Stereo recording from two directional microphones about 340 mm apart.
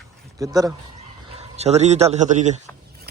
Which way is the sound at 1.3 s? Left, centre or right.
Centre.